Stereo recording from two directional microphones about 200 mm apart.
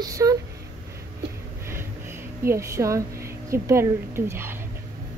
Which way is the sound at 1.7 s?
10° right (ahead or behind).